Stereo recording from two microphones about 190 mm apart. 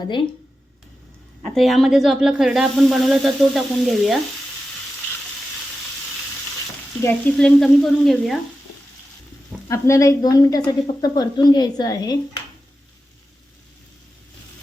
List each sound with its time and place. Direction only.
1.4 s speech: 5° left (ahead or behind)
7.0 s speech: 10° left (ahead or behind)
9.6 s a woman's voice: 15° left (ahead or behind)